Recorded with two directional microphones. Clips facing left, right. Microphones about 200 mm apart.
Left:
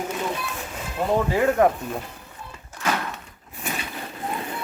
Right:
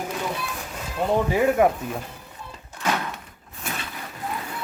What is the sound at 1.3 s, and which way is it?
Speech, 10° right (ahead or behind).